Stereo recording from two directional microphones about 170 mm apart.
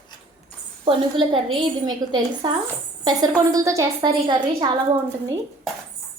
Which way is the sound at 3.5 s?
20° right (ahead or behind).